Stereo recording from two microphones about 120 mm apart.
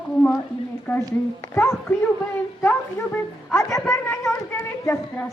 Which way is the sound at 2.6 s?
20° left (ahead or behind).